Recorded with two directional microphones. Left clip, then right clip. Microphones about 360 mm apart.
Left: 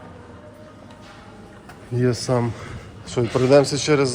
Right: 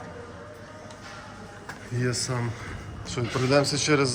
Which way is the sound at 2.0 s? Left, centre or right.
Centre.